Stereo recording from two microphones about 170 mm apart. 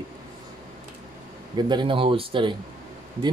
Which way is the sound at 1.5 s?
25° right (ahead or behind).